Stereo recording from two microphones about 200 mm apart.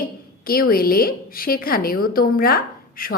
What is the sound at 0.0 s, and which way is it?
A woman's voice, 45° left (ahead or behind).